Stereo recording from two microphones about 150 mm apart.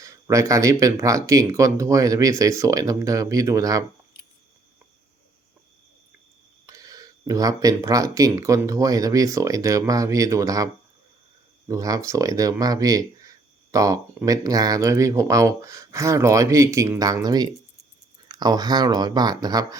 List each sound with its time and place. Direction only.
0.0 s speech: 20° right (ahead or behind)
6.7 s speech: 25° right (ahead or behind)
11.7 s speech: 20° right (ahead or behind)